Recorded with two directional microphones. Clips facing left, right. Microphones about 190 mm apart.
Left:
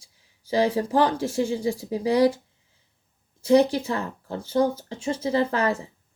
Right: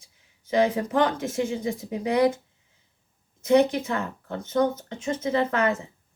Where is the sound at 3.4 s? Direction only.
30° left (ahead or behind).